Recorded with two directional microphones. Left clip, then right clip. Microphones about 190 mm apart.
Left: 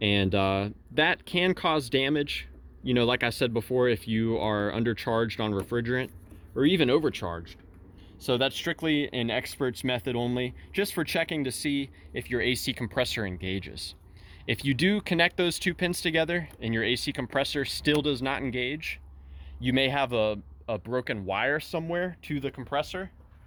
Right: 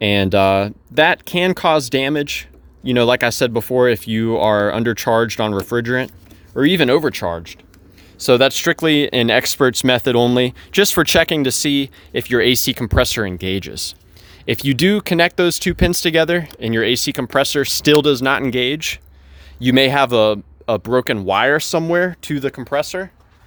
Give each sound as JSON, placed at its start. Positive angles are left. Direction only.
{"t": 0.0, "sound": "speech", "side_deg": -45}